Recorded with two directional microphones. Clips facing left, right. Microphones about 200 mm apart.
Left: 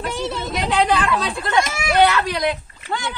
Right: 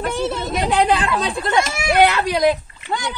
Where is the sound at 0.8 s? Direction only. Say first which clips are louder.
Right 1 dB; 30° right (ahead or behind).